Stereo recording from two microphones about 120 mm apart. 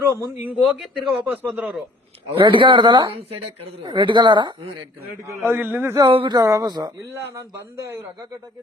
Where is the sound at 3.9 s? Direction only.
40° right (ahead or behind).